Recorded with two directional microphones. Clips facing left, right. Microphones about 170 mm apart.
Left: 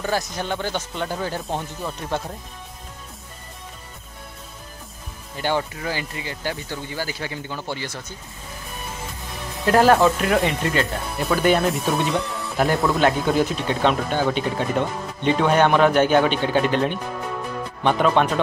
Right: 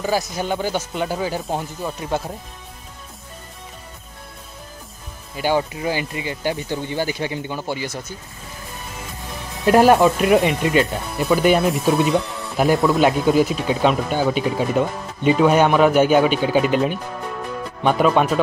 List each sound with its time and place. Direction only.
0.0 s speech: 10° right (ahead or behind)
5.4 s speech: 15° right (ahead or behind)
9.7 s speech: 15° right (ahead or behind)
11.6 s speech: centre (ahead or behind)